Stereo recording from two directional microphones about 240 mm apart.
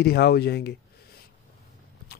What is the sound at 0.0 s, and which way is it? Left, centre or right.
Speech, left.